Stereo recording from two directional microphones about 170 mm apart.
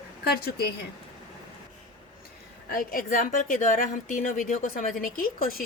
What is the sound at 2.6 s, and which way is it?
A woman's voice, 55° left (ahead or behind).